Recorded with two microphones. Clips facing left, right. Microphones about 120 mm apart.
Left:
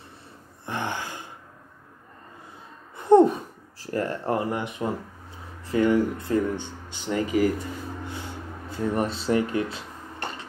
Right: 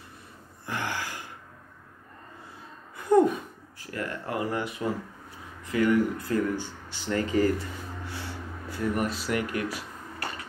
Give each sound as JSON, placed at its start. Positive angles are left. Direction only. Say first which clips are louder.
{"t": 0.7, "sound": "gasp", "louder": "left 2 dB", "side_deg": 25}
{"t": 3.0, "sound": "a sound", "louder": "left 5 dB", "side_deg": 25}
{"t": 4.5, "sound": "speech", "louder": "left 2 dB", "side_deg": 20}